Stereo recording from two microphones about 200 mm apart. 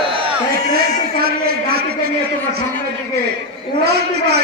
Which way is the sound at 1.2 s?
50° right (ahead or behind).